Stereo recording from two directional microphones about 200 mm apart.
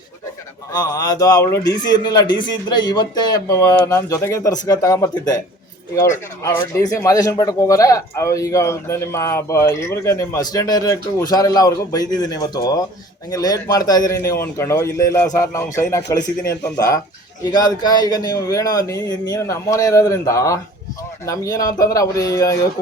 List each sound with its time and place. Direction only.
0.7 s a man's voice: 20° left (ahead or behind)